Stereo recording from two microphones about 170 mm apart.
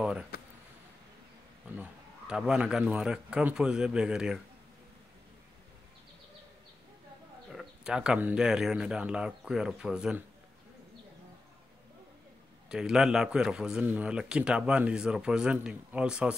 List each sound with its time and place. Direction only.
0.3 s a sound: 70° left (ahead or behind)
1.8 s a man's voice: 5° right (ahead or behind)
7.5 s a man's voice: 5° right (ahead or behind)
12.6 s a man's voice: 5° right (ahead or behind)